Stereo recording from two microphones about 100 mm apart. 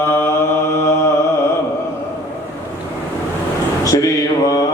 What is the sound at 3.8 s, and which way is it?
Mantra, 35° left (ahead or behind).